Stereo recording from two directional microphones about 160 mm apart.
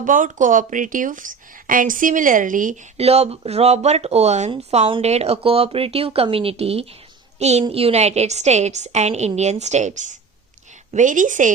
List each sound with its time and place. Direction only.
0.0 s speech: 55° right (ahead or behind)
3.0 s a woman's voice: 40° right (ahead or behind)